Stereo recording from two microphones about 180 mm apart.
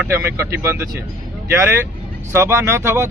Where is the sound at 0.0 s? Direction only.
10° right (ahead or behind).